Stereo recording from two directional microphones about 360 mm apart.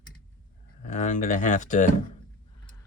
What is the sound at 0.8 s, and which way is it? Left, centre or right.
Speech, centre.